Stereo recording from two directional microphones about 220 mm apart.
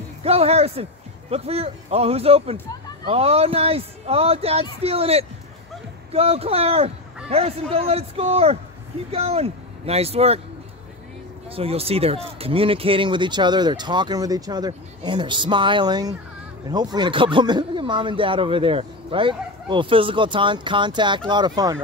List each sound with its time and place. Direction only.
0.2 s speech: 25° right (ahead or behind)
11.5 s speech: 25° right (ahead or behind)